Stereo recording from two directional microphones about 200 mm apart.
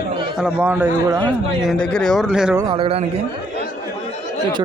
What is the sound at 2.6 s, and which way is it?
Speech, 25° right (ahead or behind).